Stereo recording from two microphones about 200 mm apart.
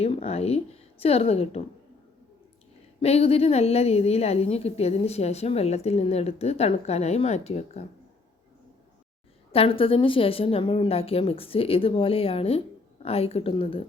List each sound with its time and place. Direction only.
0.0 s a woman's voice: 30° left (ahead or behind)
3.0 s a woman's voice: 30° left (ahead or behind)
9.5 s a woman's voice: 30° left (ahead or behind)